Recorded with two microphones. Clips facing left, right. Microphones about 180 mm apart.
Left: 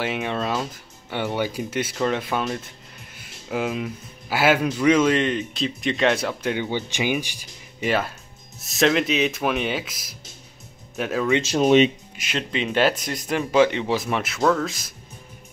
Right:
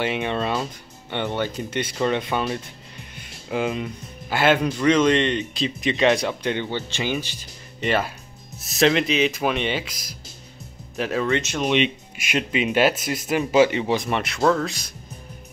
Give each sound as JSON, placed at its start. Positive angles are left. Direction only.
{"t": 0.0, "sound": "speech", "side_deg": 0}
{"t": 8.5, "sound": "speech", "side_deg": 0}
{"t": 11.4, "sound": "speech", "side_deg": 35}
{"t": 12.2, "sound": "speech", "side_deg": -10}